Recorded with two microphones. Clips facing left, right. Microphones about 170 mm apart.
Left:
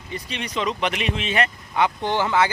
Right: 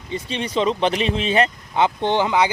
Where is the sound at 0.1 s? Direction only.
30° right (ahead or behind).